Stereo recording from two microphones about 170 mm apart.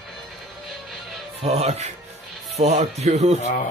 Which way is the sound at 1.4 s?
40° right (ahead or behind).